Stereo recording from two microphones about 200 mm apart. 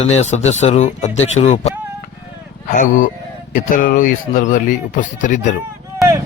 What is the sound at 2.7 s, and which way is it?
Speech, 40° left (ahead or behind).